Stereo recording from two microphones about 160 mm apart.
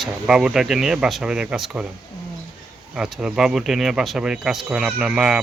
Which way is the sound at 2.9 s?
5° right (ahead or behind).